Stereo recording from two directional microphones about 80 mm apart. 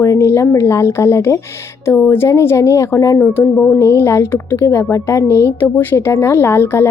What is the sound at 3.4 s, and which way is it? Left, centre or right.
A woman's voice, left.